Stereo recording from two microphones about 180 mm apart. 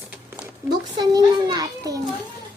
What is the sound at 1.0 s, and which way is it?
A child's voice, 20° right (ahead or behind).